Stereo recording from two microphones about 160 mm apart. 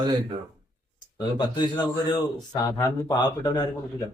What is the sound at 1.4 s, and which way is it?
Speech, 30° left (ahead or behind).